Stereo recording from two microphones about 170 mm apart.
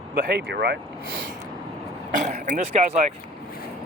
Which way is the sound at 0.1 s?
70° right (ahead or behind).